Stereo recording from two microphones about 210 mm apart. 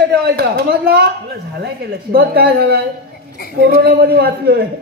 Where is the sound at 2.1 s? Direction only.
45° right (ahead or behind).